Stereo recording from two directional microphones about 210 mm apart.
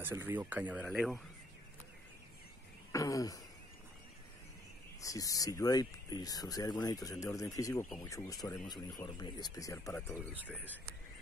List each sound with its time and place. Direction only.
0.0 s speech: 10° right (ahead or behind)
2.9 s a sound: 15° left (ahead or behind)
5.0 s speech: 15° left (ahead or behind)